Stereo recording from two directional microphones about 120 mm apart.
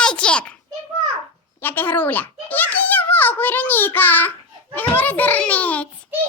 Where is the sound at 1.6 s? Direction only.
15° left (ahead or behind).